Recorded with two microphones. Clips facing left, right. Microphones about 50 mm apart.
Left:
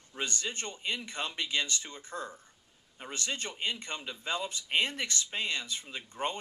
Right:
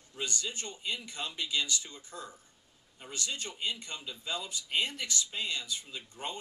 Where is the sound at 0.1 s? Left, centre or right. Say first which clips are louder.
Left 2 dB; left.